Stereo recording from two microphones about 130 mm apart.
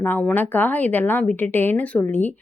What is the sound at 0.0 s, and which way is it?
A woman's voice, 15° left (ahead or behind).